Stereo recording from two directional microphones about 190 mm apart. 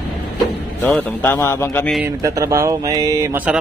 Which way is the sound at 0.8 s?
10° left (ahead or behind).